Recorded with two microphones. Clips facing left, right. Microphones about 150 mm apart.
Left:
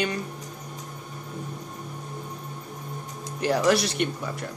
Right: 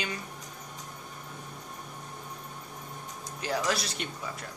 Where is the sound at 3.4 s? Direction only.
70° left (ahead or behind).